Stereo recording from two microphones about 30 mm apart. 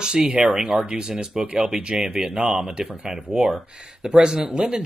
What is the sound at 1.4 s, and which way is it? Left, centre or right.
Speech, right.